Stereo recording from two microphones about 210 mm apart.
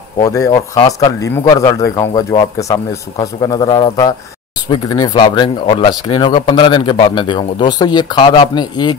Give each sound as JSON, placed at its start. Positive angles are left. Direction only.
{"t": 0.2, "sound": "speech", "side_deg": 15}